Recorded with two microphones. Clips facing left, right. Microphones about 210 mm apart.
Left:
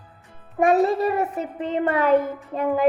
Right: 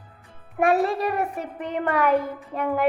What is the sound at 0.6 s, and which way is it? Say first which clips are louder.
A child's voice: left 3 dB; 20° left (ahead or behind).